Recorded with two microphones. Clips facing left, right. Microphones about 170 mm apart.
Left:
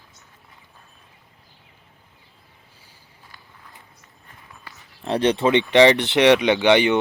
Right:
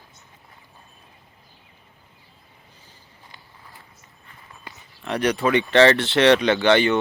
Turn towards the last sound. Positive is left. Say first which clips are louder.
# left 1 dB
turn(degrees=15)  # may be behind; listen again after turning